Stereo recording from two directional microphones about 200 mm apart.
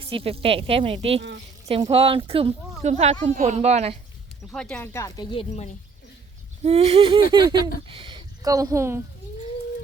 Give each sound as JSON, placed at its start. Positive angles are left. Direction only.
{"t": 0.0, "sound": "speech", "side_deg": -30}
{"t": 4.5, "sound": "speech", "side_deg": 5}
{"t": 6.6, "sound": "speech", "side_deg": -30}